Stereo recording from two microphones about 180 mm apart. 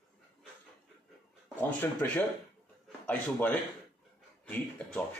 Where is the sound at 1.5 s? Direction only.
10° left (ahead or behind).